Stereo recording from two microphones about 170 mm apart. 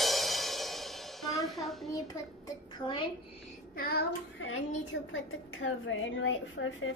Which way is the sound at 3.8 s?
65° left (ahead or behind).